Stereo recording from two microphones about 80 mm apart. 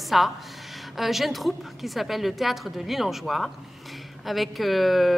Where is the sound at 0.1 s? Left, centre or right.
Centre.